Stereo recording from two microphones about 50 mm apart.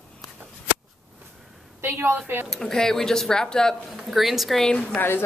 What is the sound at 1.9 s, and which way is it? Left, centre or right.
Speech, right.